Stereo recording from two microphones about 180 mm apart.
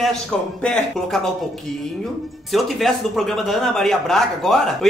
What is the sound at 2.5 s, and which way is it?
Speech, centre (ahead or behind).